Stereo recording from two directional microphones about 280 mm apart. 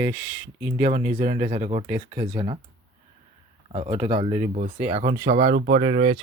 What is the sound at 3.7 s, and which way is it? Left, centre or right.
Speech, centre.